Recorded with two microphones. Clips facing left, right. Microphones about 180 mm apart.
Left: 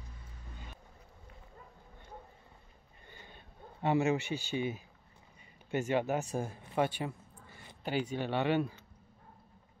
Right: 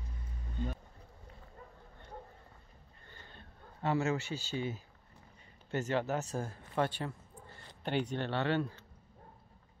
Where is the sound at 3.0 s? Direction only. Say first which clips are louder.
Left 1 dB; 15° left (ahead or behind).